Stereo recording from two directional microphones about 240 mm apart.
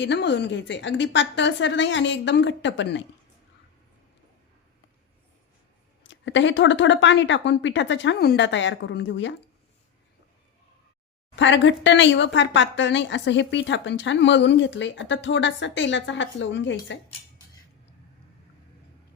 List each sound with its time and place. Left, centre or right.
0.0 s a woman's voice: left
6.1 s a woman's voice: left
11.3 s a woman's voice: left